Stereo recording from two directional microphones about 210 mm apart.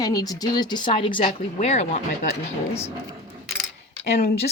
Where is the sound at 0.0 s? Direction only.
20° left (ahead or behind).